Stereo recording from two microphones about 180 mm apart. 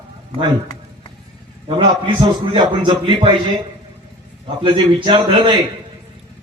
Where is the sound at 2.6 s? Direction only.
30° right (ahead or behind).